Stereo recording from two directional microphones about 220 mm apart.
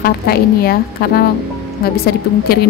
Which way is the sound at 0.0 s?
45° left (ahead or behind).